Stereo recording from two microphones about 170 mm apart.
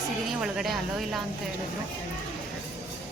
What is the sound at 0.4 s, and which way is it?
Speech, centre (ahead or behind).